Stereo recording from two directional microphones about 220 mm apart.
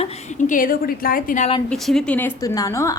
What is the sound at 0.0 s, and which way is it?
A woman's voice, 35° left (ahead or behind).